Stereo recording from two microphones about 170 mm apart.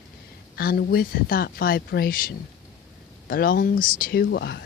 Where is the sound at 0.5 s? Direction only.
60° left (ahead or behind); by 4.6 s 80° left.